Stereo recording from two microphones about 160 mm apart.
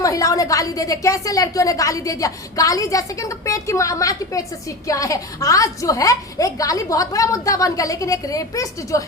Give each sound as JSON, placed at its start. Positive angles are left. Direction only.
{"t": 0.0, "sound": "a woman's voice", "side_deg": 20}